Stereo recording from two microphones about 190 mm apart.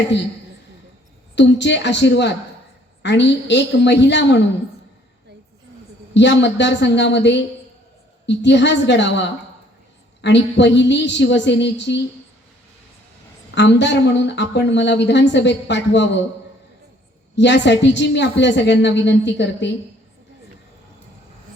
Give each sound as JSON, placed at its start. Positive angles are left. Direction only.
{"t": 1.4, "sound": "speech", "side_deg": 65}
{"t": 6.1, "sound": "speech", "side_deg": 70}
{"t": 13.5, "sound": "speech", "side_deg": 70}
{"t": 17.3, "sound": "speech", "side_deg": 70}